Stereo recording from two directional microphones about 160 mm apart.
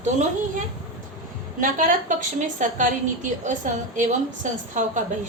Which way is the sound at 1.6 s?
55° right (ahead or behind).